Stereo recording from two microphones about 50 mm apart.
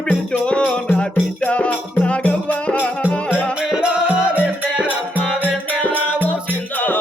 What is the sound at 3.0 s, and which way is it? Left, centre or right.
Music, centre.